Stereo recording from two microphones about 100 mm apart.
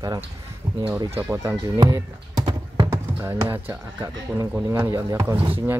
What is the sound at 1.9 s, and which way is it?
Typing, 40° right (ahead or behind).